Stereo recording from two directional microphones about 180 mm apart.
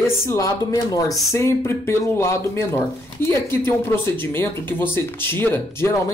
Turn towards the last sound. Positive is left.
turn(degrees=10)  # may be behind; listen again after turning